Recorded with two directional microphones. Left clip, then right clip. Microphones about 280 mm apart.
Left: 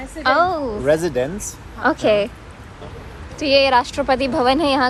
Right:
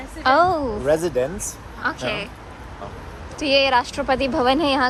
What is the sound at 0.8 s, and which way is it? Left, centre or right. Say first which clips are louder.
Speech: left 2 dB; left.